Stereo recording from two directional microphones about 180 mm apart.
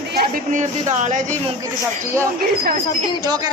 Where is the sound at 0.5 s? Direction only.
40° right (ahead or behind).